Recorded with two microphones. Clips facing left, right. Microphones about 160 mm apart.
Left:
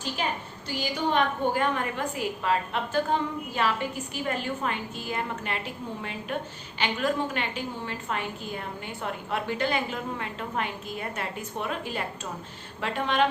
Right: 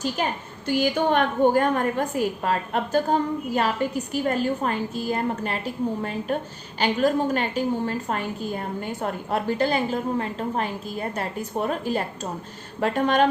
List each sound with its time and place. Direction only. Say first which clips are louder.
0.7 s a woman's voice: right 7 dB; 50° right (ahead or behind)